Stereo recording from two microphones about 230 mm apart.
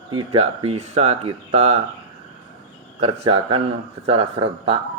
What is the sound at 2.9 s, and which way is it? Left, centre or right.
Speech, right.